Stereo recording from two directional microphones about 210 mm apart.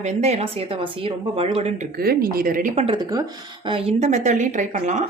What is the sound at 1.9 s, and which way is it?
Speech, 45° right (ahead or behind).